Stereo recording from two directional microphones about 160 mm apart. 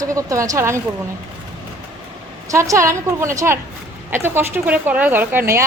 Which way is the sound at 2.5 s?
20° right (ahead or behind).